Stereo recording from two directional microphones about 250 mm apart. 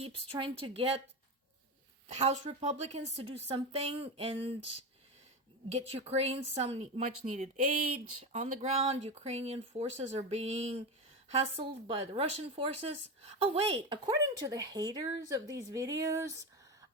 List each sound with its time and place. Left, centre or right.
0.0 s speech: right
2.0 s speech: right
5.6 s speech: right